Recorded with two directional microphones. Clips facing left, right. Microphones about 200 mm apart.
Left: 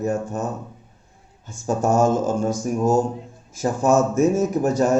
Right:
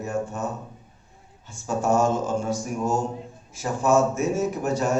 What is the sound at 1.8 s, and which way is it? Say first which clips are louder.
Speech: left 3 dB; 40° left (ahead or behind).